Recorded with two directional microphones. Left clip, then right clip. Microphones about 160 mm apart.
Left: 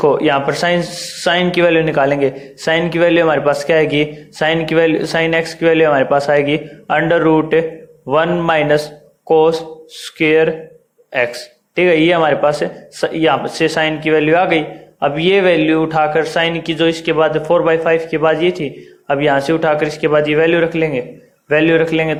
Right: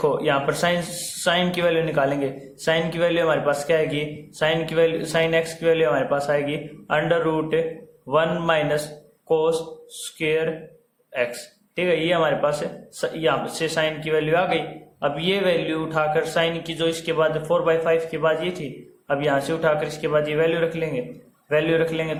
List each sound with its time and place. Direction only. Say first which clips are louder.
0.0 s speech: left 8 dB; 25° left (ahead or behind)